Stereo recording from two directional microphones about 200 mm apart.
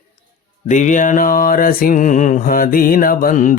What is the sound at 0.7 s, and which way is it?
Mantra, 40° left (ahead or behind).